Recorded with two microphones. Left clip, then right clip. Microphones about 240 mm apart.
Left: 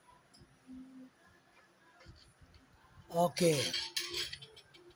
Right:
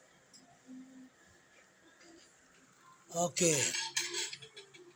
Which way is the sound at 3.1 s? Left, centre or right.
Centre.